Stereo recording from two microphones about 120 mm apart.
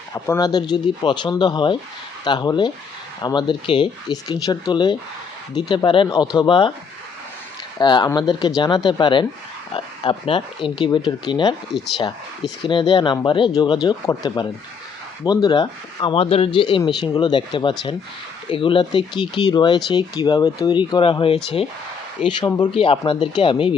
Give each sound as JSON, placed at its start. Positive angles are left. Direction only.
{"t": 0.1, "sound": "speech", "side_deg": 30}
{"t": 4.3, "sound": "speech", "side_deg": 35}
{"t": 7.8, "sound": "speech", "side_deg": 35}
{"t": 22.3, "sound": "speech", "side_deg": 35}
{"t": 22.7, "sound": "speech", "side_deg": 50}